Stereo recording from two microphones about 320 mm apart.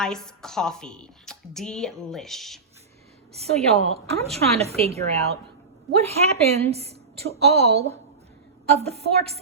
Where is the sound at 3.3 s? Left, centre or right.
Centre.